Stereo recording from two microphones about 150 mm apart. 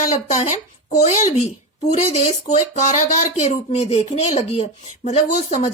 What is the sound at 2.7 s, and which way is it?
Speech, 55° left (ahead or behind).